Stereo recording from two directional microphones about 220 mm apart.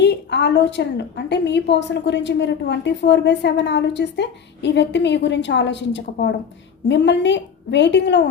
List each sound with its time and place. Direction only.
0.0 s a woman's voice: 50° left (ahead or behind)